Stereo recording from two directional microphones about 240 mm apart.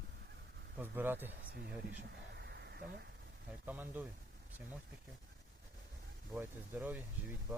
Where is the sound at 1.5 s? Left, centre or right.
Right.